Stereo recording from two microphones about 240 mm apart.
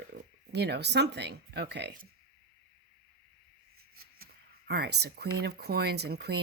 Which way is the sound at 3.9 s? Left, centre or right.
Right.